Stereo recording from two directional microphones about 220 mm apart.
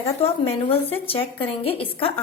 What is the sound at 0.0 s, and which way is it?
A woman's voice, 25° left (ahead or behind).